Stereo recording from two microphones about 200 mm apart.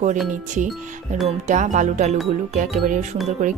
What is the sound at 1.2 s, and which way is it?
A woman's voice, 35° right (ahead or behind).